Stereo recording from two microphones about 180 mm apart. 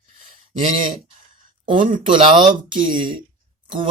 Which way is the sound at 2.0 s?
30° right (ahead or behind).